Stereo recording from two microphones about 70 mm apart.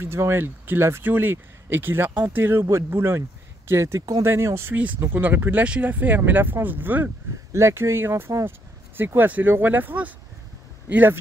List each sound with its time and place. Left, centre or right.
0.0 s speech: right
4.2 s speech: right
7.5 s speech: right